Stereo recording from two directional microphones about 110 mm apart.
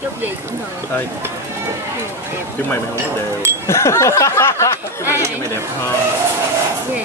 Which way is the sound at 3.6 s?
25° left (ahead or behind).